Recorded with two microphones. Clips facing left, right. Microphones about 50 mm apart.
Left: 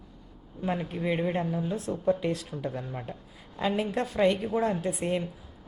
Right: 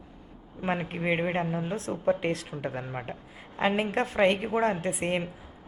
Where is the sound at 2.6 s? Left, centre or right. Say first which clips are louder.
Right 1 dB; right.